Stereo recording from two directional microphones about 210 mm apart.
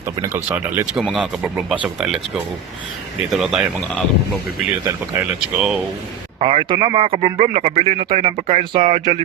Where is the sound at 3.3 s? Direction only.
Centre (ahead or behind).